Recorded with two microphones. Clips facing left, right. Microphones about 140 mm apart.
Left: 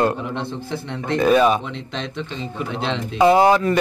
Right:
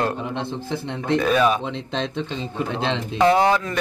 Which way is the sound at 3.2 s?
10° left (ahead or behind).